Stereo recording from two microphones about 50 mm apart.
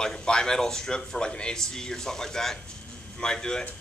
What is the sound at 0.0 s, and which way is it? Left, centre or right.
Speech, centre.